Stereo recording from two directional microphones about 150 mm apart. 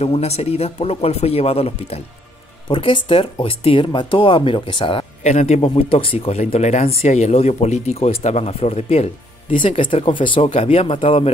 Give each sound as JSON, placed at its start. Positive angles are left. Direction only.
{"t": 0.0, "sound": "speech", "side_deg": 45}